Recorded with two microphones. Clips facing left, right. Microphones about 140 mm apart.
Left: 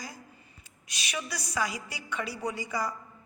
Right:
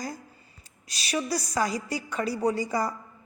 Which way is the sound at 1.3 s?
40° right (ahead or behind).